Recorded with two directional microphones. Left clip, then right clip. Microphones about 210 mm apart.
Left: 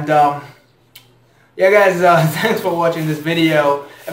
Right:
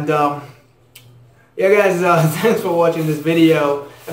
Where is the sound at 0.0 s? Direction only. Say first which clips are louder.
Left 4 dB; 15° left (ahead or behind).